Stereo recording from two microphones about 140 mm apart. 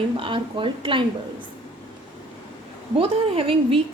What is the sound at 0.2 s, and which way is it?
Speech, 35° right (ahead or behind).